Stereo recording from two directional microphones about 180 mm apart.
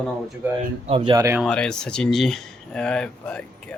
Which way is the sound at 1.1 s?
15° right (ahead or behind).